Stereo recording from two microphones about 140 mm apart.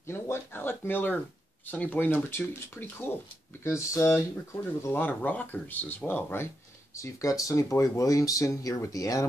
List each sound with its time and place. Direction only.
0.0 s a sound: 15° left (ahead or behind)
1.7 s speech: 10° left (ahead or behind)
7.0 s speech: 25° left (ahead or behind)